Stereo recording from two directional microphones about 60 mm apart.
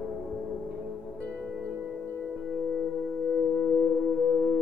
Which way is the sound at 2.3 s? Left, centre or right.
Centre.